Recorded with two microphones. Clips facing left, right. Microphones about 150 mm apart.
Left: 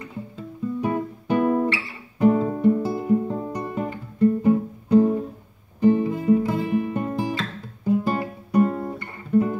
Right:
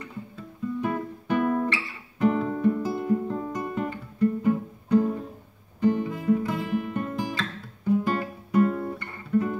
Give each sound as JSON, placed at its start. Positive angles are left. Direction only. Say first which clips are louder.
{"t": 0.4, "sound": "guitar", "louder": "left 3 dB", "side_deg": 20}
{"t": 2.1, "sound": "music", "louder": "left 5 dB", "side_deg": 20}
{"t": 5.8, "sound": "guitar", "louder": "left 5 dB", "side_deg": 25}